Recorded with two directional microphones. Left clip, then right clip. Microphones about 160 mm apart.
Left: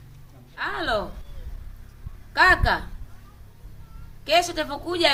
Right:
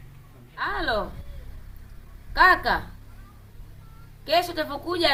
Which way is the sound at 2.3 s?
25° left (ahead or behind).